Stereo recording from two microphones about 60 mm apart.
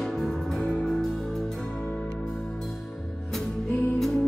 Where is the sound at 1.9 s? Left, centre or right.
Centre.